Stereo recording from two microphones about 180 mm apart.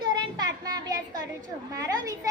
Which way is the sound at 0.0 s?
25° right (ahead or behind).